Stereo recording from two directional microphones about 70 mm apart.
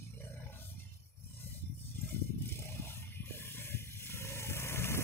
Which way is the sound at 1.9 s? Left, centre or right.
Left.